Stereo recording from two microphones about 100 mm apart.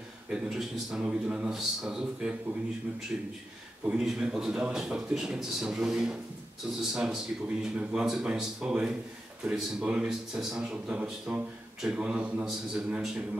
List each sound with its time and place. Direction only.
0.3 s a man's voice: 5° right (ahead or behind)